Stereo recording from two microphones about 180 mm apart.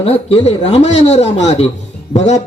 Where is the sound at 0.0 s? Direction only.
35° left (ahead or behind).